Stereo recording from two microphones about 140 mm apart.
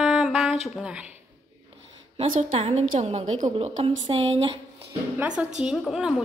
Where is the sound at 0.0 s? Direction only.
5° right (ahead or behind).